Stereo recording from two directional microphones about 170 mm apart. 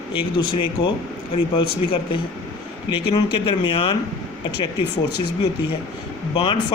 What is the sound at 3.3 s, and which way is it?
Speech, 30° left (ahead or behind).